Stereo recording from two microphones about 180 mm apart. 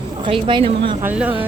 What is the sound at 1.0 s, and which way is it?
Speech, 10° right (ahead or behind).